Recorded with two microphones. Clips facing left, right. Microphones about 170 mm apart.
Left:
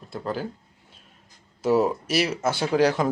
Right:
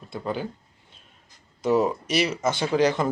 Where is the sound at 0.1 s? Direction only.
Centre (ahead or behind).